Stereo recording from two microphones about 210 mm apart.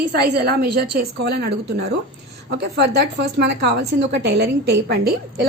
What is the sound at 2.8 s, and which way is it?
A woman's voice, 55° right (ahead or behind).